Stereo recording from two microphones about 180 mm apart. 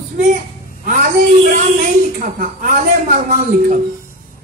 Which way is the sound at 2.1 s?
50° right (ahead or behind).